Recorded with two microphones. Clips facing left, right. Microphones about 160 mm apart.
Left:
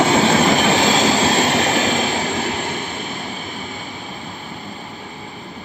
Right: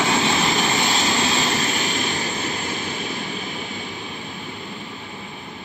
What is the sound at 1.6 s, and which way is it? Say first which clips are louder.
Vehicle: left 7 dB; 80° left.